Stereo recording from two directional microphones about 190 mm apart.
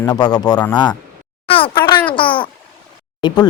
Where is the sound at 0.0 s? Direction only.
20° left (ahead or behind).